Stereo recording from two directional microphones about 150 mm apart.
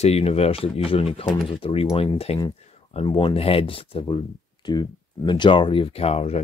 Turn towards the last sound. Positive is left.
turn(degrees=45)  # may be behind; listen again after turning